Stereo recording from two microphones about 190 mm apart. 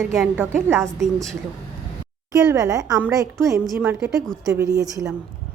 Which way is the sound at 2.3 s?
15° right (ahead or behind).